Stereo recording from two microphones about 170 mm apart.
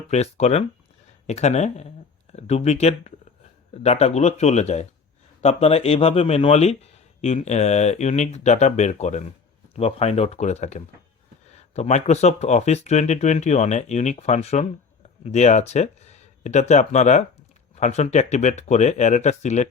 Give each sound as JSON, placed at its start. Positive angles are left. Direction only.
{"t": 0.1, "sound": "speech", "side_deg": 40}